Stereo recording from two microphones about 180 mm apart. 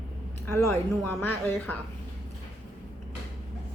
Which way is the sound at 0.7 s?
10° left (ahead or behind).